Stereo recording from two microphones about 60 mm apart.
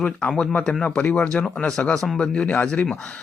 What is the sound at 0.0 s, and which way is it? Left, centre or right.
Speech, centre.